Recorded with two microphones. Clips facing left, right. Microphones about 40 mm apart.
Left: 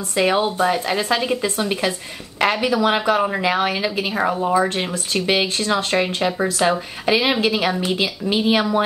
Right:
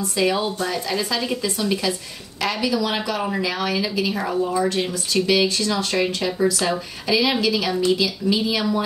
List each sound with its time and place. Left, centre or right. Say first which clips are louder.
0.1 s speech: left 4 dB; left